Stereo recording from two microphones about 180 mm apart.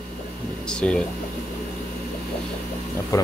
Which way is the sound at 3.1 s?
20° left (ahead or behind).